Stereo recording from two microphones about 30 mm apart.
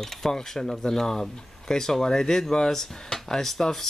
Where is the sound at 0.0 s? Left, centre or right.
Centre.